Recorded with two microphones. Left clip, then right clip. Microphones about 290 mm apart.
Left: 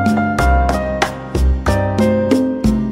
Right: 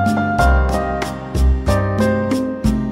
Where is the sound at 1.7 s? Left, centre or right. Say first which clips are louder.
Left 2 dB; centre.